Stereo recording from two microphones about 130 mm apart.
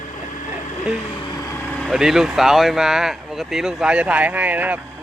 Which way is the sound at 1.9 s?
5° right (ahead or behind).